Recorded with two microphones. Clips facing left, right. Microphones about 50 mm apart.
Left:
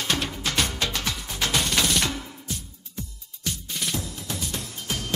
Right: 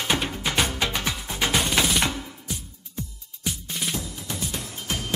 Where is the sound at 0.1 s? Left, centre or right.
Centre.